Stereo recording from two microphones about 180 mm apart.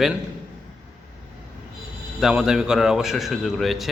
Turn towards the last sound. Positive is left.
turn(degrees=0)  # may be behind; listen again after turning